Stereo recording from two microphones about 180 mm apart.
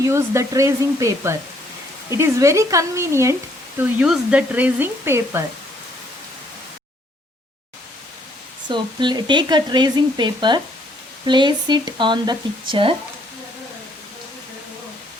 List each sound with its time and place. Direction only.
0.0 s speech: 15° right (ahead or behind)
3.8 s speech: 5° right (ahead or behind)
8.6 s speech: 25° right (ahead or behind)